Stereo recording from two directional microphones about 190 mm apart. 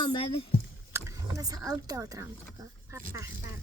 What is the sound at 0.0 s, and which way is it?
Speech, 25° left (ahead or behind).